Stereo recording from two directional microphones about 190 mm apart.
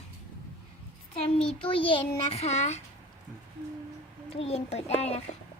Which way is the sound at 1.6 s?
25° left (ahead or behind).